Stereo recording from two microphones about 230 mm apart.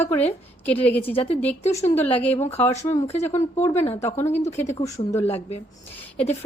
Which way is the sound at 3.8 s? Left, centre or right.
Left.